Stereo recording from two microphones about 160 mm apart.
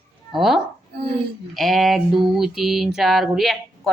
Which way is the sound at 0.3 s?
Centre (ahead or behind).